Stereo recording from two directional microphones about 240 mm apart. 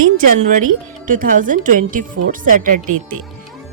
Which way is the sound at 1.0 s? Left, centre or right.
Right.